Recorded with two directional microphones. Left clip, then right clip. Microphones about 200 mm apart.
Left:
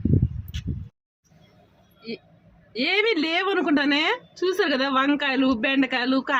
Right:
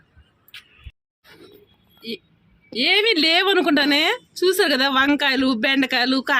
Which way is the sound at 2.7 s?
25° right (ahead or behind).